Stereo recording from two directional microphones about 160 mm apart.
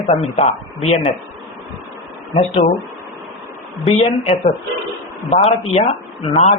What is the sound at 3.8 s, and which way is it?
Speech, 40° left (ahead or behind).